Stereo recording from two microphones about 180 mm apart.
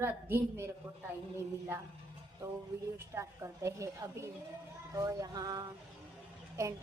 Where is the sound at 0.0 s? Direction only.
15° right (ahead or behind).